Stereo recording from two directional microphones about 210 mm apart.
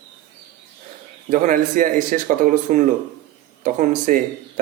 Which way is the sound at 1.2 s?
40° right (ahead or behind).